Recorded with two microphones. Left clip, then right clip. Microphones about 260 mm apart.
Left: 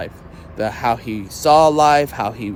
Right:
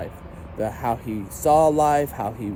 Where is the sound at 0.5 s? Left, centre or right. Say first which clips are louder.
Left 6 dB; centre.